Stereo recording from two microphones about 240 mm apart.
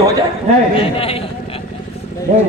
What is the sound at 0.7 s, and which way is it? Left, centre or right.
Speech, left.